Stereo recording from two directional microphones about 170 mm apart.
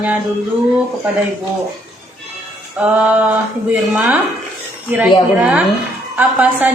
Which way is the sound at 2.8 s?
10° right (ahead or behind).